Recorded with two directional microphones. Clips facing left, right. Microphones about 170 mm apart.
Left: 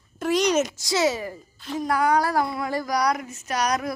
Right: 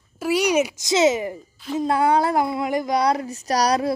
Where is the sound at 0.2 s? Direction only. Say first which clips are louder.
Right 2 dB; 10° right (ahead or behind).